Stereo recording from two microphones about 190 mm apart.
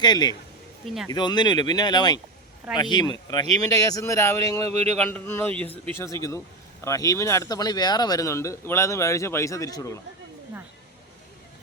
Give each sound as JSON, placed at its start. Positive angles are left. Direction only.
{"t": 0.0, "sound": "speech", "side_deg": 20}
{"t": 4.7, "sound": "speech", "side_deg": -35}
{"t": 4.9, "sound": "speech", "side_deg": 10}